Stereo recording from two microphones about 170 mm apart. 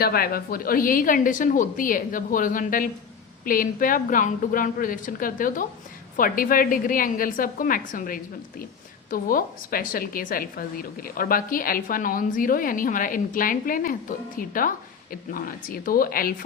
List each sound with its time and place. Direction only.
0.0 s a woman's voice: 60° left (ahead or behind)